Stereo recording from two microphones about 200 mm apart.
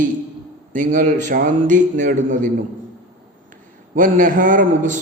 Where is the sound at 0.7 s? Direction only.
40° right (ahead or behind).